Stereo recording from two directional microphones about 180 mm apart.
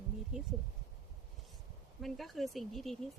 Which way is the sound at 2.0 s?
Centre (ahead or behind).